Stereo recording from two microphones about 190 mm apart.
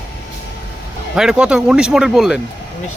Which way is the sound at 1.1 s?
5° right (ahead or behind).